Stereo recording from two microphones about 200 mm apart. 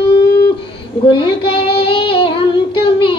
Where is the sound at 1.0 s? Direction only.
25° left (ahead or behind).